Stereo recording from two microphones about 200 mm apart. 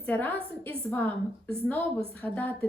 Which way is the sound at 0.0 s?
10° left (ahead or behind).